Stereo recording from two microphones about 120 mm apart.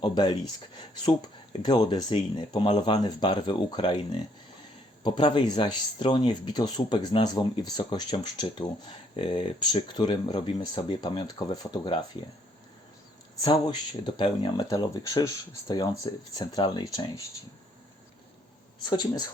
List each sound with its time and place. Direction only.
0.0 s speech: 40° left (ahead or behind)
5.0 s speech: 40° left (ahead or behind)
9.1 s speech: 50° left (ahead or behind); by 11.9 s 35° left (ahead or behind)
13.4 s speech: 40° left (ahead or behind)
18.9 s speech: 35° left (ahead or behind)